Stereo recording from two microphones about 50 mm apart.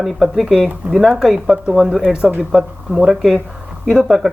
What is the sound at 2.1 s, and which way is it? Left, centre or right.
Speech, centre.